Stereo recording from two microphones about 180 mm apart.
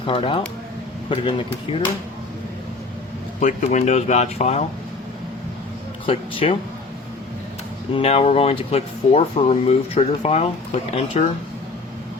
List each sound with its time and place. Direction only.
0.0 s speech: 30° left (ahead or behind)
3.4 s speech: 40° left (ahead or behind)
6.1 s speech: 30° left (ahead or behind)
7.9 s speech: 35° left (ahead or behind)